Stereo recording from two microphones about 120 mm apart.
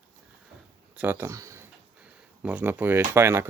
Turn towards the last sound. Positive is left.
turn(degrees=-20)  # may be behind; listen again after turning